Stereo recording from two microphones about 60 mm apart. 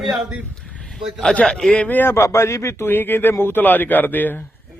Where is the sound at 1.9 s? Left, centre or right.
Left.